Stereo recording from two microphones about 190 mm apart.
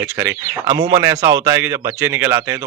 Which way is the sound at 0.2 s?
15° right (ahead or behind).